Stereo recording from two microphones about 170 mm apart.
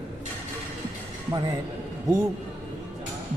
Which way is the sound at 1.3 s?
25° right (ahead or behind).